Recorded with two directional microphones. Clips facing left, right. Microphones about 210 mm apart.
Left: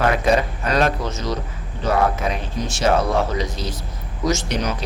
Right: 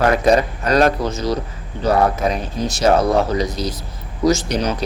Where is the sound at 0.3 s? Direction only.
40° right (ahead or behind).